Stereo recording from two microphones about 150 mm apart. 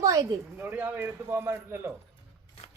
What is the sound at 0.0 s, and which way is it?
A man's voice, 20° right (ahead or behind).